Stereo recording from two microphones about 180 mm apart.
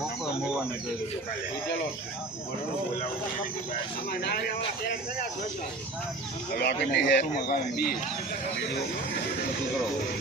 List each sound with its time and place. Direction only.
4.1 s speech: 60° left (ahead or behind)
6.5 s speech: 65° left (ahead or behind)
7.3 s speech: 55° left (ahead or behind)